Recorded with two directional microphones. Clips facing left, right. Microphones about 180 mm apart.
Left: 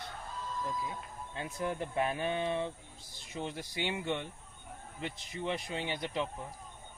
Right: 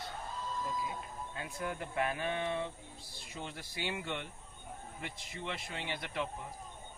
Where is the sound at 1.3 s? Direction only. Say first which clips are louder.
Left 5 dB; 25° left (ahead or behind).